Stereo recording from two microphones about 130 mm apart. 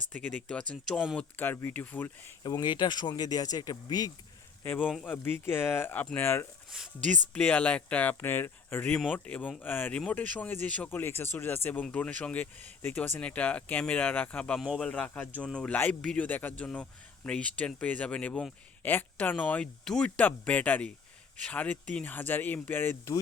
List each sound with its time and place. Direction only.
0.1 s a man's voice: 10° left (ahead or behind)
2.4 s speech: 35° left (ahead or behind)
4.6 s a man's voice: 10° left (ahead or behind)
6.7 s speech: 5° right (ahead or behind)
7.3 s a man's voice: 10° left (ahead or behind)